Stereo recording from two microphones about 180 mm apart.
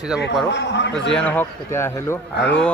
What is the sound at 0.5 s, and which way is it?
Speech, 75° left (ahead or behind).